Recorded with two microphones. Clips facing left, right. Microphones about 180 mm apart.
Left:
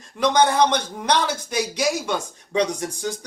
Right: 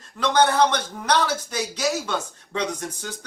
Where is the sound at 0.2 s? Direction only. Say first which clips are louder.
Left 1 dB; 15° left (ahead or behind).